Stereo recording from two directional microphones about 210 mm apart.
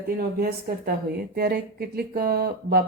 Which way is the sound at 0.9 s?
45° right (ahead or behind).